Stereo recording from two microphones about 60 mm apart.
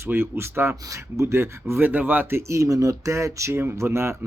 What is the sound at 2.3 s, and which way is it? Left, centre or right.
Speech, right.